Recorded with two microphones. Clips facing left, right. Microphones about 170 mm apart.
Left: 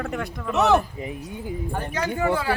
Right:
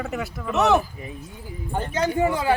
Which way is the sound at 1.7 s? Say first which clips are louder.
Right 6 dB; 20° right (ahead or behind).